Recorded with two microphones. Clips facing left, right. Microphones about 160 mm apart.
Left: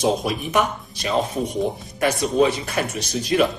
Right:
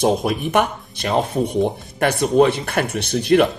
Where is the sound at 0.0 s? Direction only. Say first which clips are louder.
Right 3 dB; 55° right (ahead or behind).